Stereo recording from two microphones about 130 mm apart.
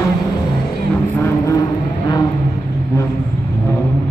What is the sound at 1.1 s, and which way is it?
Vehicle, 20° left (ahead or behind).